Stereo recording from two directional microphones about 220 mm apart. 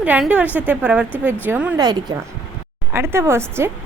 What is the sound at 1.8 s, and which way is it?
A woman's voice, 20° right (ahead or behind).